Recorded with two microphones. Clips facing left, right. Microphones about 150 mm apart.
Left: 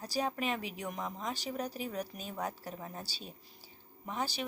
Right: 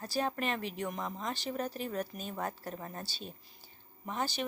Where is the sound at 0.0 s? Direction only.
10° left (ahead or behind).